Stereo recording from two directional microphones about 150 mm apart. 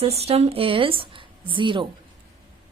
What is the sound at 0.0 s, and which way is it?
A woman's voice, 45° right (ahead or behind).